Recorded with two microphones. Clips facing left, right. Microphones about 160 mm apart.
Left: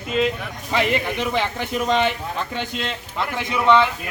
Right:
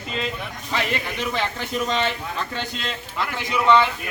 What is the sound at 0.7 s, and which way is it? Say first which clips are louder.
Speech: left 5 dB; 15° left (ahead or behind).